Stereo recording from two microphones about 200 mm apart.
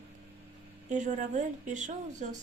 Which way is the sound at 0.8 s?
35° right (ahead or behind).